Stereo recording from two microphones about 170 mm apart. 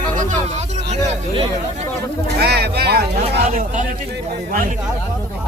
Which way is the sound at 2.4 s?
70° right (ahead or behind).